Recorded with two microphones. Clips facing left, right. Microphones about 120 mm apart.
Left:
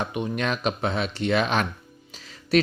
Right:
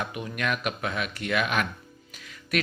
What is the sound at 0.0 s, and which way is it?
Speech, 25° left (ahead or behind).